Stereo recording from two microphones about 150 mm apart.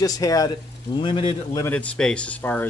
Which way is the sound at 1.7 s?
10° left (ahead or behind).